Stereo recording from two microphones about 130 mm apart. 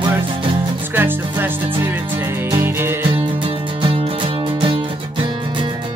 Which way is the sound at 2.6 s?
15° right (ahead or behind).